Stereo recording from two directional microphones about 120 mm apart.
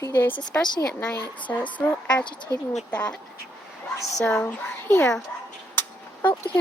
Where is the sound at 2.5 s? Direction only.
25° left (ahead or behind).